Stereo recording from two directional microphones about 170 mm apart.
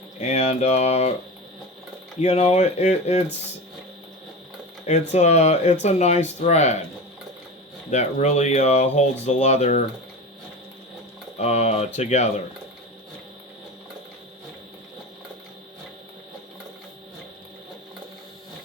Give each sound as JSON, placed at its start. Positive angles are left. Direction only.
{"t": 0.2, "sound": "speech", "side_deg": 40}
{"t": 2.2, "sound": "speech", "side_deg": 40}
{"t": 4.9, "sound": "speech", "side_deg": 40}
{"t": 7.9, "sound": "speech", "side_deg": 40}
{"t": 11.3, "sound": "speech", "side_deg": 40}